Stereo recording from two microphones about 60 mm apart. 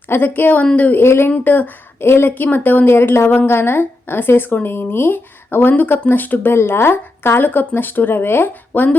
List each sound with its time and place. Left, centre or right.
0.1 s a woman's voice: left
1.0 s speech: left
1.5 s a woman's voice: left